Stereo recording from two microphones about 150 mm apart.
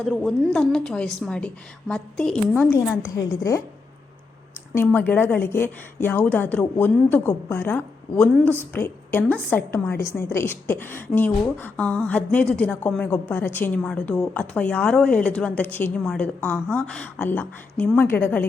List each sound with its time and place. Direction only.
0.0 s a woman's voice: centre (ahead or behind); by 3.6 s 20° left (ahead or behind)
4.7 s a woman's voice: 10° left (ahead or behind)